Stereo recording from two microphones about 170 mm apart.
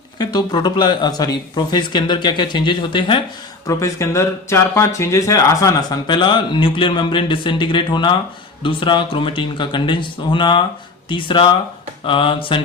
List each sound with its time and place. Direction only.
0.2 s speech: 25° left (ahead or behind)
3.7 s speech: 20° left (ahead or behind)